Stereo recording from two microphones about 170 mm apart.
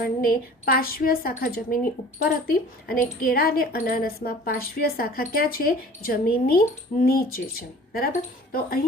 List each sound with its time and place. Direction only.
0.0 s a woman's voice: 60° left (ahead or behind)
8.5 s a woman's voice: 60° left (ahead or behind)